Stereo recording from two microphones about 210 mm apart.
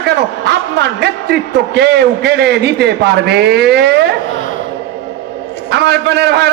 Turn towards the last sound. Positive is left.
turn(degrees=-50)  # may be behind; listen again after turning